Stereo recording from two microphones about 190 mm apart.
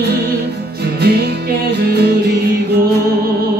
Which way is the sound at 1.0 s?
60° right (ahead or behind).